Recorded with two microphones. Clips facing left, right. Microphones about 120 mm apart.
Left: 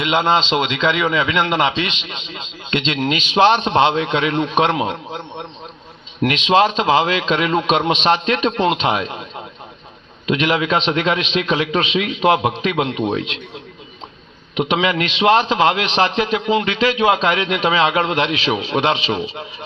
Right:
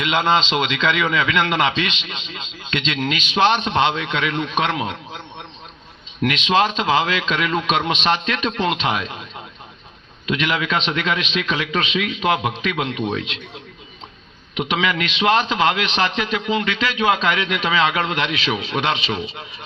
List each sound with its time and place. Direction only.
0.6 s a man's voice: 15° left (ahead or behind)
3.0 s a man's voice: 35° left (ahead or behind)
14.6 s a man's voice: 30° left (ahead or behind)